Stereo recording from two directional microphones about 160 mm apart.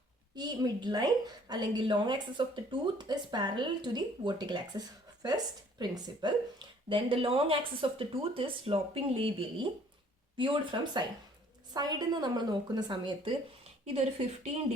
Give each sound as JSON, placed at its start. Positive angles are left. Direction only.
{"t": 0.3, "sound": "speech", "side_deg": -25}
{"t": 5.8, "sound": "speech", "side_deg": -25}
{"t": 10.3, "sound": "speech", "side_deg": -30}
{"t": 13.8, "sound": "speech", "side_deg": -40}